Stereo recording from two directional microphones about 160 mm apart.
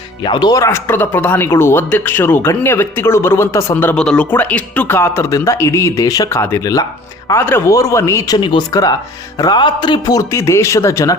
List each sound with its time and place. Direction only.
0.3 s a man's voice: 25° left (ahead or behind)
8.4 s a man's voice: 30° left (ahead or behind)